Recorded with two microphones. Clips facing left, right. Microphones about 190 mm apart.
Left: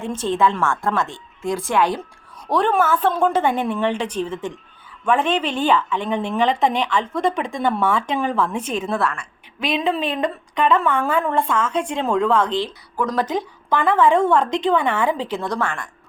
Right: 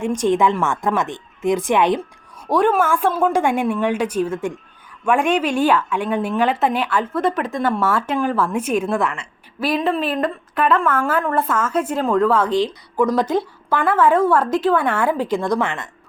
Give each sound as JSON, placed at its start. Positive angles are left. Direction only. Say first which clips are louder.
{"t": 0.0, "sound": "speech", "louder": "right 3 dB", "side_deg": -15}
{"t": 2.5, "sound": "speech", "louder": "right 2 dB", "side_deg": -10}
{"t": 9.6, "sound": "a woman's voice", "louder": "right 2 dB", "side_deg": -5}